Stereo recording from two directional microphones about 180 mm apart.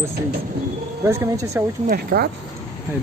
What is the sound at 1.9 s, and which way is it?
Speech, 55° right (ahead or behind).